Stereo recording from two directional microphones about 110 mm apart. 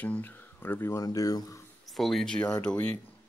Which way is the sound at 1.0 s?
35° left (ahead or behind).